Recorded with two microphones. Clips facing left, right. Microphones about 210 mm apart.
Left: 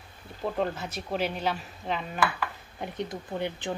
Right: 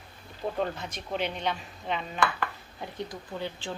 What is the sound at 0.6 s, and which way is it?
Speech, 5° left (ahead or behind).